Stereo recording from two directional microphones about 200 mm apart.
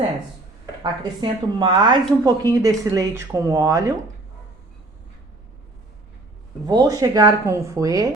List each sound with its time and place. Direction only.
0.8 s a woman's voice: 20° right (ahead or behind)
6.7 s speech: 20° right (ahead or behind)